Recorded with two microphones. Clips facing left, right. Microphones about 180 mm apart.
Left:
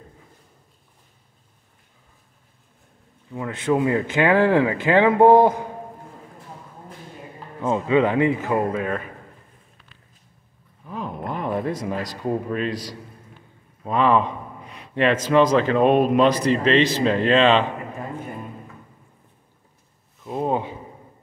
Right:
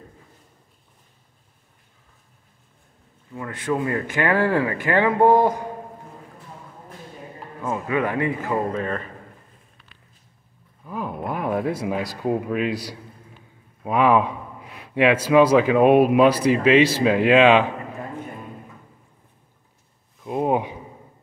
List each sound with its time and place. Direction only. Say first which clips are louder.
3.3 s speech: left 3 dB; 20° left (ahead or behind)
7.6 s speech: left 5 dB; 25° left (ahead or behind)
8.5 s speech: left 2 dB; 10° left (ahead or behind)
10.9 s a man's voice: right 1 dB; 5° right (ahead or behind)
20.2 s a sound: right 2 dB; 10° right (ahead or behind)